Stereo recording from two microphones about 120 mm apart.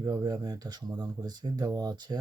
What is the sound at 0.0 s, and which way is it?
Speech, 30° right (ahead or behind).